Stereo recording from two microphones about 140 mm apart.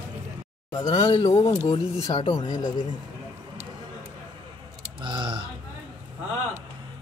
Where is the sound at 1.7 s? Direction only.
40° left (ahead or behind).